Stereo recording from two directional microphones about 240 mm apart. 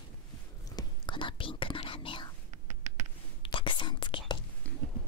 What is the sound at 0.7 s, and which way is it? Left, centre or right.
Whispering, centre.